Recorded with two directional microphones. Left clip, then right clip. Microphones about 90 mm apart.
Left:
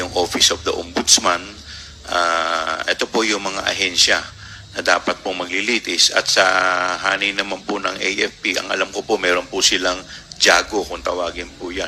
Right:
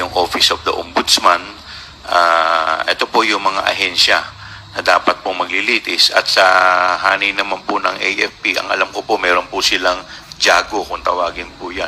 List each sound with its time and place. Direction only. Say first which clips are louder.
0.0 s speech: right 3 dB; 25° left (ahead or behind)